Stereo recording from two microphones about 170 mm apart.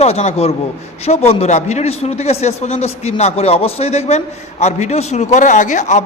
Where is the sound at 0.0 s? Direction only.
40° left (ahead or behind).